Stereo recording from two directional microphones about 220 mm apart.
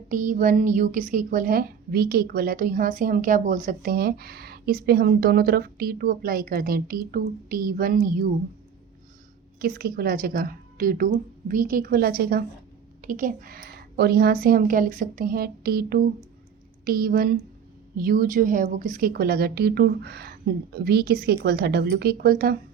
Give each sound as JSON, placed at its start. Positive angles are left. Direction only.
{"t": 0.1, "sound": "a woman's voice", "side_deg": -35}
{"t": 9.6, "sound": "a woman's voice", "side_deg": -40}